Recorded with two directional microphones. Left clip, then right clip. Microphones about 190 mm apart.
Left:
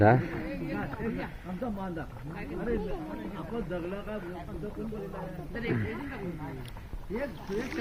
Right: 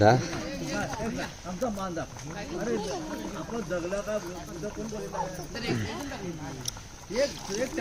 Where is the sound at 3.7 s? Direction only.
55° right (ahead or behind).